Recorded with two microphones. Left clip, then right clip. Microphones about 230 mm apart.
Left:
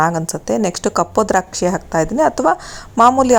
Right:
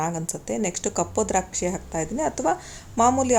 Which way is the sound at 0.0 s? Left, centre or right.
Left.